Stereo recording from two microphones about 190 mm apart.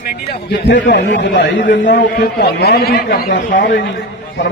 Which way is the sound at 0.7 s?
65° left (ahead or behind).